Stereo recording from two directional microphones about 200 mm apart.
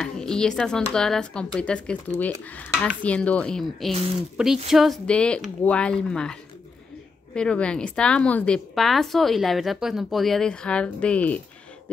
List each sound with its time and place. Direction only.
0.0 s a woman's voice: 5° left (ahead or behind)
7.3 s a woman's voice: 5° left (ahead or behind)